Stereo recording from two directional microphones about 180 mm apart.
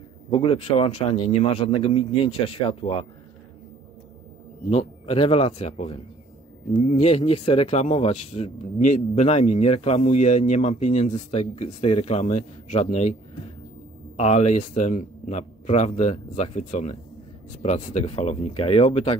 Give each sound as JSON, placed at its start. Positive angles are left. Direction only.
{"t": 0.3, "sound": "speech", "side_deg": 30}
{"t": 4.6, "sound": "speech", "side_deg": 30}
{"t": 14.1, "sound": "speech", "side_deg": 35}